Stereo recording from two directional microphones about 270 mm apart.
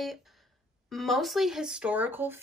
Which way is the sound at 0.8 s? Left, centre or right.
Centre.